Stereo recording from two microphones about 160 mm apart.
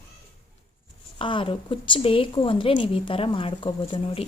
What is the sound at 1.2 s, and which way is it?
Speech, 30° left (ahead or behind).